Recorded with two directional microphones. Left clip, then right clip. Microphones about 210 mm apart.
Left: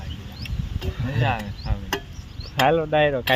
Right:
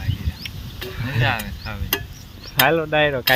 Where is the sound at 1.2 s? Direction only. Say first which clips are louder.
Right 3 dB; 15° left (ahead or behind).